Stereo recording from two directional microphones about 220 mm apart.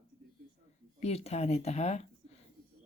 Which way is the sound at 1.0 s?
30° left (ahead or behind).